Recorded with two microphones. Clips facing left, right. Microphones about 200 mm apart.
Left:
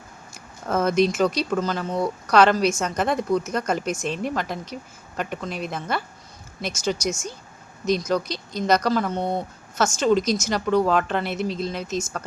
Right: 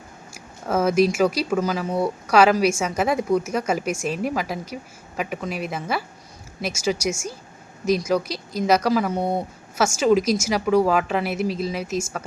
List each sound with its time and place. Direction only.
0.3 s speech: 5° right (ahead or behind)